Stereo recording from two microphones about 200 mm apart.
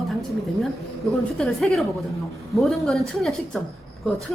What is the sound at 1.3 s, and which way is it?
A woman's voice, centre (ahead or behind).